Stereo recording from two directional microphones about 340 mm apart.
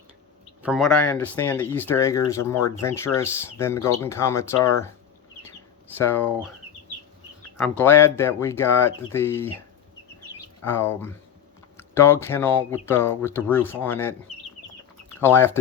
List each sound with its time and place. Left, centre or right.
0.6 s speech: centre
5.4 s chicken: centre
7.5 s speech: centre
10.6 s speech: centre
14.3 s chicken: centre
15.2 s speech: centre